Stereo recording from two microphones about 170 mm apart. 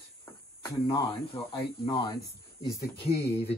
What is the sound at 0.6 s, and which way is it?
Speech, 25° left (ahead or behind).